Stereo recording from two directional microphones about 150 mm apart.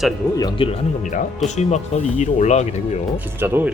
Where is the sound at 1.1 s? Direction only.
50° left (ahead or behind).